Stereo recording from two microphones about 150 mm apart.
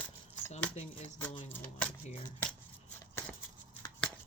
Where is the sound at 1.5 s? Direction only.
10° left (ahead or behind).